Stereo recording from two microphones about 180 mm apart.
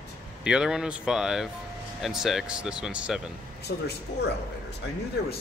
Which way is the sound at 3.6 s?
65° left (ahead or behind).